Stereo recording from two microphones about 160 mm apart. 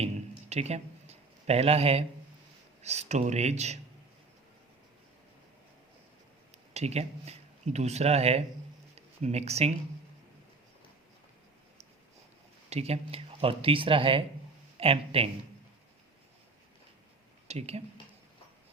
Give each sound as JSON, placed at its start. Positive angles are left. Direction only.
{"t": 0.5, "sound": "speech", "side_deg": -40}
{"t": 6.7, "sound": "speech", "side_deg": -40}
{"t": 12.7, "sound": "speech", "side_deg": -40}
{"t": 17.5, "sound": "speech", "side_deg": -40}